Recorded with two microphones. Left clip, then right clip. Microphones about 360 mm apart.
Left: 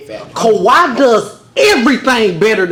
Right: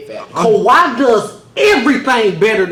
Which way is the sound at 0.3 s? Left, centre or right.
Left.